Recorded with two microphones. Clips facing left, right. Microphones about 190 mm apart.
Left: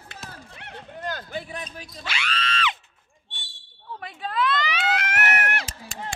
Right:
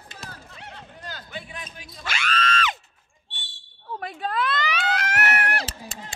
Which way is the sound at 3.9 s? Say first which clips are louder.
Right 1 dB; 45° right (ahead or behind).